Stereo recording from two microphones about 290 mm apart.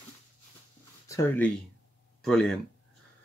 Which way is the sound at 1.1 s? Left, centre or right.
Centre.